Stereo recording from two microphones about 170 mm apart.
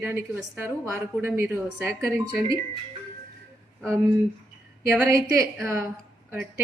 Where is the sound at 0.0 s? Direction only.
10° right (ahead or behind).